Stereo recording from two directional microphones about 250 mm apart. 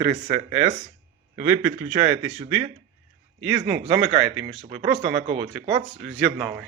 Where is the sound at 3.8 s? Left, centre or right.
Right.